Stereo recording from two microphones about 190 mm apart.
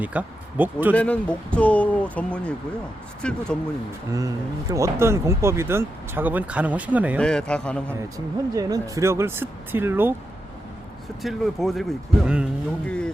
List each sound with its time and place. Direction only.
0.0 s speech: 10° right (ahead or behind)
0.9 s speech: 5° left (ahead or behind)
4.1 s speech: 15° right (ahead or behind)
7.2 s speech: 5° left (ahead or behind)
8.5 s speech: 15° right (ahead or behind)
11.2 s speech: centre (ahead or behind)